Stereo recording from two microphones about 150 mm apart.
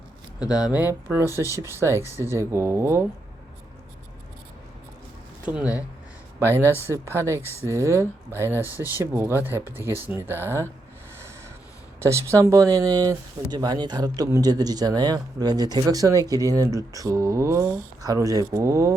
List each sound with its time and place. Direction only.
0.3 s speech: 25° left (ahead or behind)
0.7 s speech: 10° right (ahead or behind)
1.3 s speech: 20° left (ahead or behind)
1.8 s speech: 15° right (ahead or behind)
6.4 s speech: 15° right (ahead or behind)
11.9 s speech: 20° right (ahead or behind)